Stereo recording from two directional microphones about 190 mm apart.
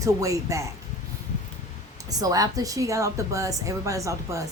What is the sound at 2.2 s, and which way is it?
A woman's voice, 20° right (ahead or behind).